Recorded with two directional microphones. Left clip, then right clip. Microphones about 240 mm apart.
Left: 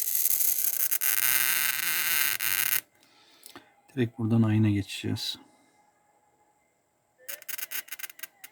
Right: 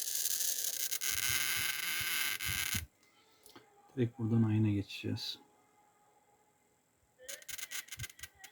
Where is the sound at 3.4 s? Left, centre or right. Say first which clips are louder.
Left 8 dB; left.